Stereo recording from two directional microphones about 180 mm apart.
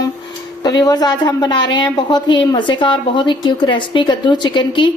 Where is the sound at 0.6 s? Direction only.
20° left (ahead or behind).